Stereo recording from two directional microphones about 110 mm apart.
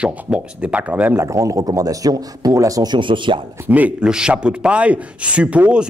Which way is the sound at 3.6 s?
15° right (ahead or behind).